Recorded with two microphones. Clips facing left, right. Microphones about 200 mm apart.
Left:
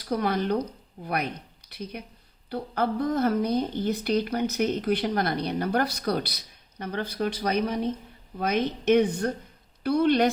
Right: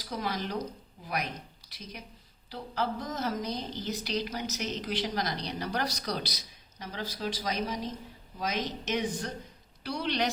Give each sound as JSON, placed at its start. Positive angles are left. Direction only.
{"t": 0.0, "sound": "a woman's voice", "side_deg": 60}